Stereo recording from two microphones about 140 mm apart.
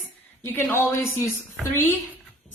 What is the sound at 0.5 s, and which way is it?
A man's voice, 15° left (ahead or behind).